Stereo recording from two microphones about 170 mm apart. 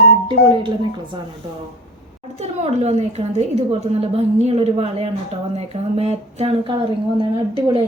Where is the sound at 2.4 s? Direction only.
40° right (ahead or behind).